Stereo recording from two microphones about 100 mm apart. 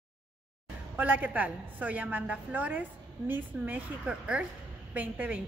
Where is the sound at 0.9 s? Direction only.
20° right (ahead or behind).